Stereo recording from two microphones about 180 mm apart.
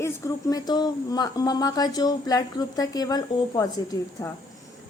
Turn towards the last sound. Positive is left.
turn(degrees=20)  # may be behind; listen again after turning